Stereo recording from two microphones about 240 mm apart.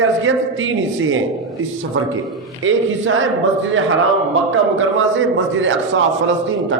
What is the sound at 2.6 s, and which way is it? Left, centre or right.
A man's voice, right.